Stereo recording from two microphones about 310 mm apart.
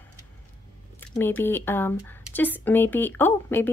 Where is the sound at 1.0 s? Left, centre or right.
Centre.